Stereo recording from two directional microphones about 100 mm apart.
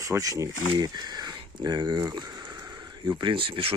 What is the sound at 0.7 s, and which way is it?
Speech, 45° right (ahead or behind).